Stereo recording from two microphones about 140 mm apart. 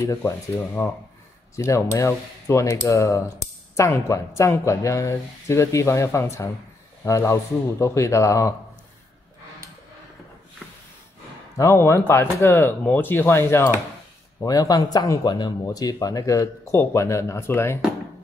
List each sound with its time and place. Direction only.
0.0 s speech: 20° left (ahead or behind)
1.6 s speech: 20° left (ahead or behind)
11.5 s speech: 20° left (ahead or behind)